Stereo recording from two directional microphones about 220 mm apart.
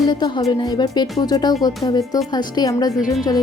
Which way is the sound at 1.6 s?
20° left (ahead or behind).